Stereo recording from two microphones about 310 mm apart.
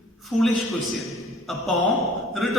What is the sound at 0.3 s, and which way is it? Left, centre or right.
A man's voice, centre.